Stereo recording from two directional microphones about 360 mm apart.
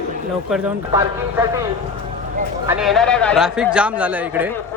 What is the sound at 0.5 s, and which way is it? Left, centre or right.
Speech, centre.